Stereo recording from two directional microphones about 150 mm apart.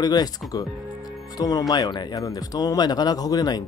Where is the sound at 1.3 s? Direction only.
25° left (ahead or behind).